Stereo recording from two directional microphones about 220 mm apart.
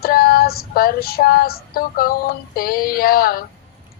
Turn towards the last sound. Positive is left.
turn(degrees=45)  # may be behind; listen again after turning